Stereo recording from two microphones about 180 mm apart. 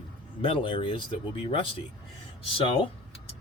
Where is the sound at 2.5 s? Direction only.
30° left (ahead or behind).